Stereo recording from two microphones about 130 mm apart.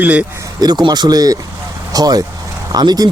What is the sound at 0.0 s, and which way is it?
Speech, 10° right (ahead or behind).